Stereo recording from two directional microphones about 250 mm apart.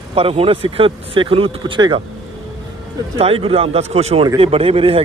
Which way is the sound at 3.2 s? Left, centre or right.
Right.